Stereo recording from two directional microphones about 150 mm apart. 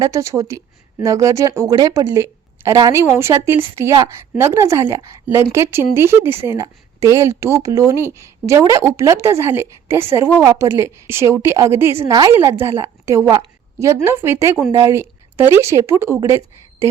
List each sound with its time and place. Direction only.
0.0 s speech: 20° right (ahead or behind)
12.3 s a woman's voice: 15° right (ahead or behind)